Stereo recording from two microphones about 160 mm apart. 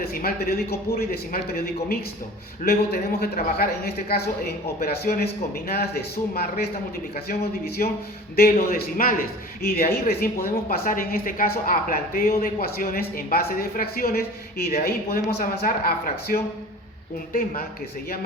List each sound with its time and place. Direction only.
0.0 s a man's voice: 70° left (ahead or behind)